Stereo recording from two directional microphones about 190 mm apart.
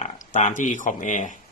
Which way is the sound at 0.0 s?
40° left (ahead or behind).